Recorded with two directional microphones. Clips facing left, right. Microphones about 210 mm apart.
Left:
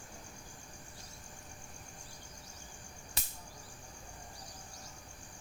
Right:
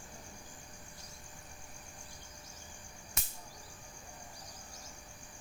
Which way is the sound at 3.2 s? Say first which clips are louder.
Right 1 dB; 30° left (ahead or behind).